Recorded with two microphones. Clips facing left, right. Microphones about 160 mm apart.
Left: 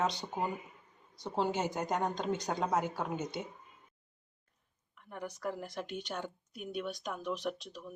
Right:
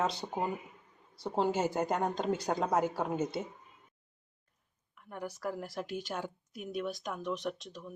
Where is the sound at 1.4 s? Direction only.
Centre (ahead or behind).